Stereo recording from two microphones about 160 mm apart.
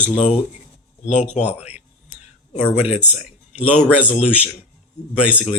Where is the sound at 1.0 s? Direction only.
45° left (ahead or behind).